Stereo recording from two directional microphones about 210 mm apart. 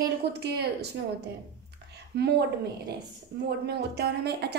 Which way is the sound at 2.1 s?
50° right (ahead or behind).